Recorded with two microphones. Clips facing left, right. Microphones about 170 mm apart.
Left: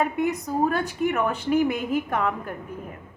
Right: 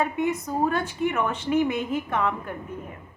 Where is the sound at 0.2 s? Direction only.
35° left (ahead or behind).